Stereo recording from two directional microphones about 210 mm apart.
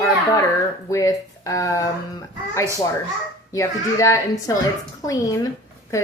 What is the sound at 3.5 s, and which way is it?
Speech, 15° left (ahead or behind).